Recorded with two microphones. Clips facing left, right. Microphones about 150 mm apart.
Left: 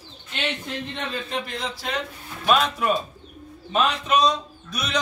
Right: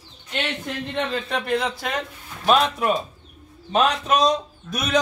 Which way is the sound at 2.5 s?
30° right (ahead or behind).